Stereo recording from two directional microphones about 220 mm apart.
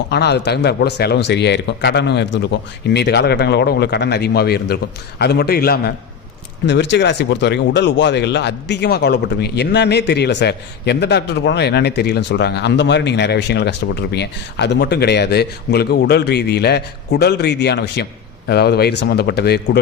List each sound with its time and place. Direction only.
0.1 s speech: 50° left (ahead or behind)